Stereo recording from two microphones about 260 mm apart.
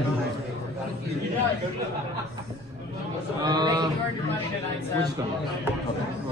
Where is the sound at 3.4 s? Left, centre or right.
Centre.